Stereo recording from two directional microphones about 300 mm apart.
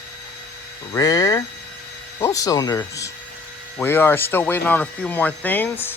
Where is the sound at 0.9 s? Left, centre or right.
Centre.